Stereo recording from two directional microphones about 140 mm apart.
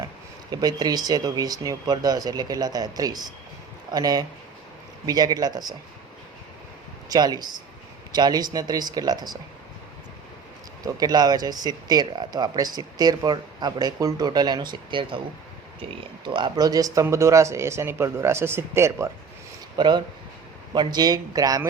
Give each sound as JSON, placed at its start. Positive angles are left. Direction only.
{"t": 0.5, "sound": "speech", "side_deg": -30}
{"t": 7.1, "sound": "speech", "side_deg": -30}
{"t": 10.8, "sound": "speech", "side_deg": -30}
{"t": 19.7, "sound": "speech", "side_deg": -30}